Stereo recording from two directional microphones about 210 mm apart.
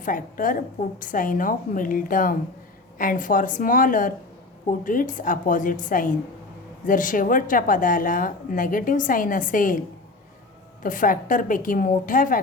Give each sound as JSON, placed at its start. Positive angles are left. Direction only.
{"t": 0.0, "sound": "a woman's voice", "side_deg": 40}
{"t": 10.8, "sound": "a woman's voice", "side_deg": 40}